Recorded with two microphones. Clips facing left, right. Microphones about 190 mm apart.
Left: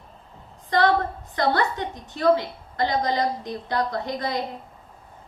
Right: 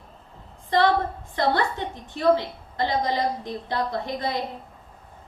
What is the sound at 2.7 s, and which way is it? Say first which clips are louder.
A woman's voice: left 1 dB; 25° right (ahead or behind).